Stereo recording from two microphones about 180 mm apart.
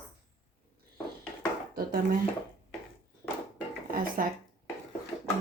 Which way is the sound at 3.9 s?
55° right (ahead or behind).